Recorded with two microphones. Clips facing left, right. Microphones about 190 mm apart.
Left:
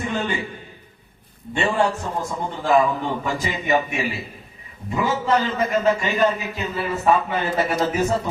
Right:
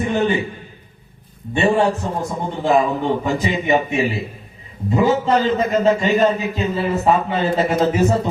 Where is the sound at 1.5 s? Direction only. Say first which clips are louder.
Right 5 dB; 20° right (ahead or behind).